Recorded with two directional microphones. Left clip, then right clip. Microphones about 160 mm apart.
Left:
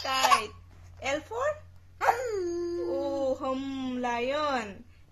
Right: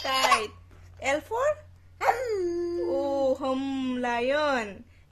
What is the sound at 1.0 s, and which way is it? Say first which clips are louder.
Speech: right 4 dB; 45° right (ahead or behind).